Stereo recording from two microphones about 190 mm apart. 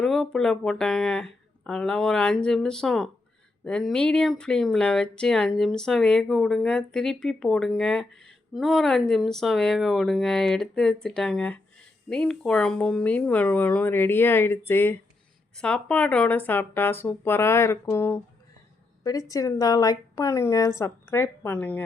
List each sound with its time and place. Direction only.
0.0 s a woman's voice: centre (ahead or behind)